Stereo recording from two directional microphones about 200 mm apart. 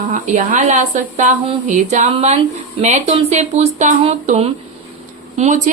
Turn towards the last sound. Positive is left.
turn(degrees=-35)  # may be behind; listen again after turning